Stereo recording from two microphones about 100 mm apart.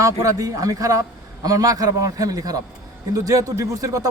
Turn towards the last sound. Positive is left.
turn(degrees=-35)  # may be behind; listen again after turning